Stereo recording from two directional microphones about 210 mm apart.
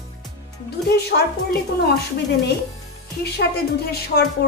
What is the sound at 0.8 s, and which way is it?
Speech, 50° left (ahead or behind).